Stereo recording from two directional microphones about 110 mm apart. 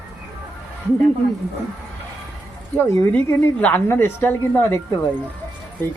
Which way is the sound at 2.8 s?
20° left (ahead or behind).